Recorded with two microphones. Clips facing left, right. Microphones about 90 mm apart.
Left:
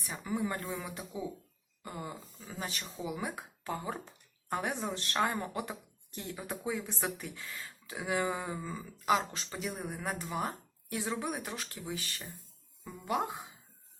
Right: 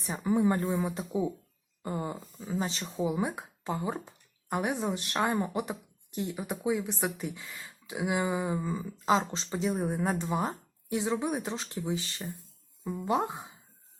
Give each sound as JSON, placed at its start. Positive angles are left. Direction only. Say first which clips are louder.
{"t": 0.0, "sound": "speech", "louder": "right 8 dB", "side_deg": -30}